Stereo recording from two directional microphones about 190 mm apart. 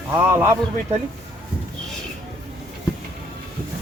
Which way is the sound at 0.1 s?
15° right (ahead or behind).